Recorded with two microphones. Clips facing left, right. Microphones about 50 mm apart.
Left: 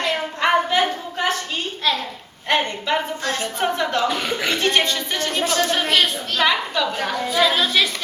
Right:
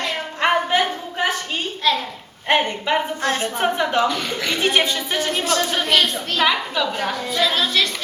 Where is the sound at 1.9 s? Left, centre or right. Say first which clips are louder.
Right 2 dB; centre.